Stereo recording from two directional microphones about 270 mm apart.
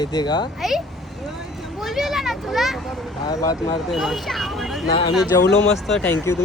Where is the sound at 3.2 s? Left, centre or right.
Centre.